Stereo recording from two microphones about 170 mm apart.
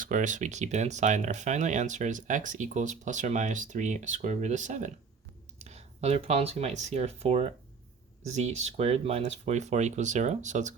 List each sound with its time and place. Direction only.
0.0 s speech: 50° right (ahead or behind)